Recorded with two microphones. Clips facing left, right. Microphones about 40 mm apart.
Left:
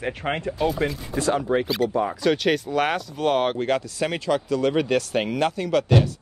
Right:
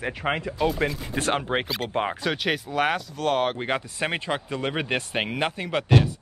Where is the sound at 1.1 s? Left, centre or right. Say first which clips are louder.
Left 4 dB; right.